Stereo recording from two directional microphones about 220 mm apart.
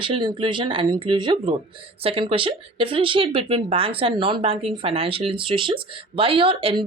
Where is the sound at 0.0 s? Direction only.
20° right (ahead or behind).